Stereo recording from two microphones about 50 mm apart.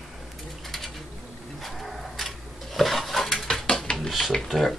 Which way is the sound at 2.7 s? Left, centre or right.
Centre.